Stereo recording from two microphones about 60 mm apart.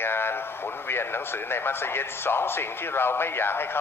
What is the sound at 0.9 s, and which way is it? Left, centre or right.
Speech, left.